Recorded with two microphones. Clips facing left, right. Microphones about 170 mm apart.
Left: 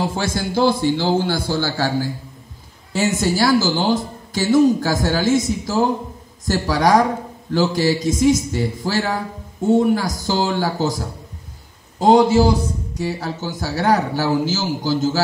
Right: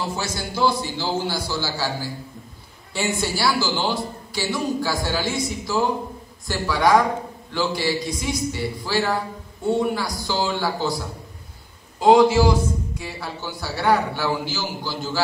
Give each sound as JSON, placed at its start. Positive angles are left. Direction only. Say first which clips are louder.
{"t": 0.1, "sound": "a man's voice", "louder": "left 6 dB", "side_deg": 50}
{"t": 12.1, "sound": "a man's voice", "louder": "left 2 dB", "side_deg": 35}